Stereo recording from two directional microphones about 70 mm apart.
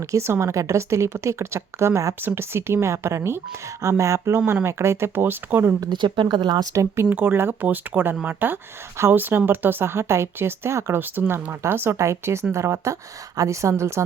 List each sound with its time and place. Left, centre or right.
0.1 s speech: right
5.9 s speech: right
6.7 s speech: right
7.1 s speech: right
9.0 s speech: right